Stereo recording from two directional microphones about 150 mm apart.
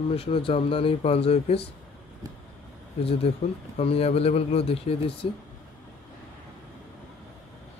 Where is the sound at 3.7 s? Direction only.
40° left (ahead or behind).